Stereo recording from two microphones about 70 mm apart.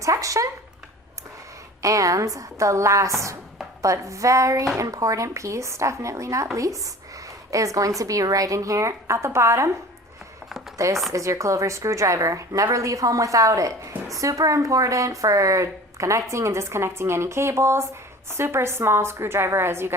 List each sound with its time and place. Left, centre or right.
0.0 s speech: right
1.8 s speech: right
10.8 s a woman's voice: right